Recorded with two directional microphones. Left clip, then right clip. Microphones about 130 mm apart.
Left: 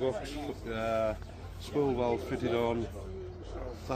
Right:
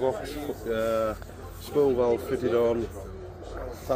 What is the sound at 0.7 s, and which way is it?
Speech, 50° left (ahead or behind).